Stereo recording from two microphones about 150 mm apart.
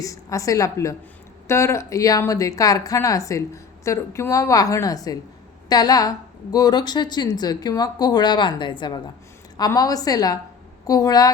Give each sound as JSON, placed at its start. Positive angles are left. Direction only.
{"t": 0.0, "sound": "a woman's voice", "side_deg": 20}